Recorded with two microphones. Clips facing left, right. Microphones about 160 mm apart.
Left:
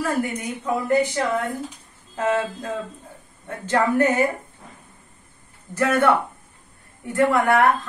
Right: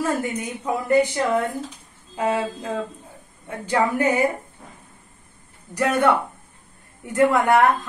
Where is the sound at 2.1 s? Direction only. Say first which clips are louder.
Even; 10° right (ahead or behind).